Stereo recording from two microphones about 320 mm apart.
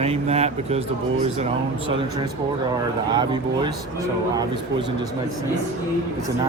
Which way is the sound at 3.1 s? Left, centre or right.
Centre.